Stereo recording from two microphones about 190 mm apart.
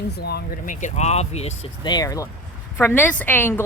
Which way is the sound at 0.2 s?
55° left (ahead or behind).